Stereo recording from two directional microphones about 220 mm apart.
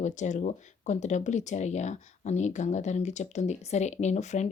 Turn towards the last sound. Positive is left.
turn(degrees=30)  # may be behind; listen again after turning